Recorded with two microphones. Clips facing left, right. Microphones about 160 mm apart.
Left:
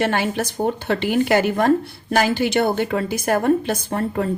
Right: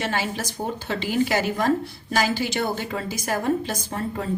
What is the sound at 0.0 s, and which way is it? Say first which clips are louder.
A woman's voice: left 6 dB; 60° left (ahead or behind).